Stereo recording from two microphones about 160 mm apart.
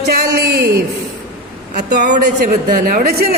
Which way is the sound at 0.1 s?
85° right.